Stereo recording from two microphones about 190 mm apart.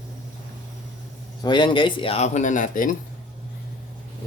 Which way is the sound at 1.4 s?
25° left (ahead or behind).